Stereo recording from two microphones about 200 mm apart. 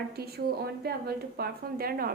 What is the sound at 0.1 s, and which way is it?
A woman's voice, 50° right (ahead or behind).